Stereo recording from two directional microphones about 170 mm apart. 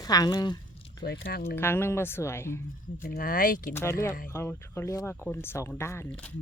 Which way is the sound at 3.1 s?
55° left (ahead or behind).